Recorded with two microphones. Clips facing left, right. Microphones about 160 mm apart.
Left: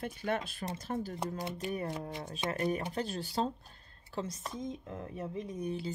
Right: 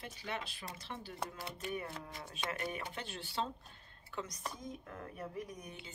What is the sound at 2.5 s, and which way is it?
Speech, 40° left (ahead or behind).